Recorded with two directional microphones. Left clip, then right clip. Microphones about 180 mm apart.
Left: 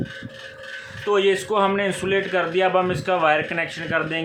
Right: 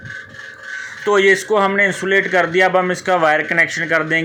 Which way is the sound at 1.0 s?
25° right (ahead or behind).